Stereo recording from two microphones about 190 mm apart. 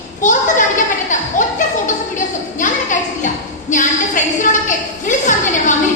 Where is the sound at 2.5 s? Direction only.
40° left (ahead or behind).